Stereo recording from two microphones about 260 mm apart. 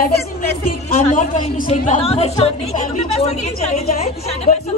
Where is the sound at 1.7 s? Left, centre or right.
Left.